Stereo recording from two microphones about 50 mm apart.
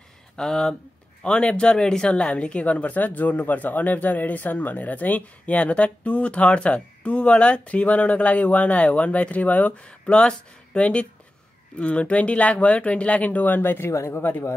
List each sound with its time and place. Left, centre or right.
0.4 s speech: centre; by 9.8 s left
9.8 s speech: left